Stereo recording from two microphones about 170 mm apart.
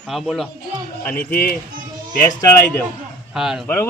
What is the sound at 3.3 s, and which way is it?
Speech, 5° right (ahead or behind).